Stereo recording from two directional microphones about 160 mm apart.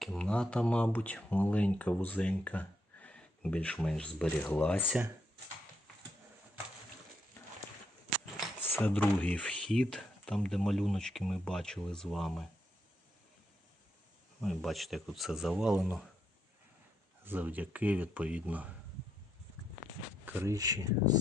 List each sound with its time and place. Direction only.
0.0 s speech: 5° left (ahead or behind)
4.9 s speech: 10° right (ahead or behind)
9.0 s speech: 10° left (ahead or behind)
14.4 s speech: centre (ahead or behind)
17.2 s speech: 10° right (ahead or behind)
20.2 s speech: 15° right (ahead or behind)